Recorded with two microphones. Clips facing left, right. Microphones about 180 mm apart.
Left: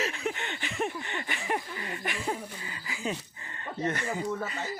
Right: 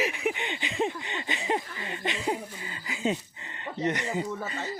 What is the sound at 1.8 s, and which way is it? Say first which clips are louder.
Speech: right 3 dB; 20° right (ahead or behind).